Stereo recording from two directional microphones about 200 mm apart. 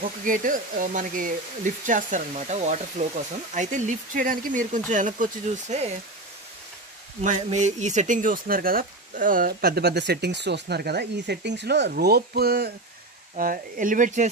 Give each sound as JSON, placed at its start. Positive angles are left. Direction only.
{"t": 0.2, "sound": "speech", "side_deg": -40}
{"t": 7.2, "sound": "speech", "side_deg": -35}